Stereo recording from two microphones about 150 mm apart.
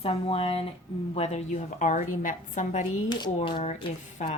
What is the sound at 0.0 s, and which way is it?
A woman's voice, 40° left (ahead or behind).